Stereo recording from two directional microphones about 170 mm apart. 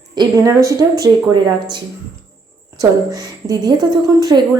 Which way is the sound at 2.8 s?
20° right (ahead or behind).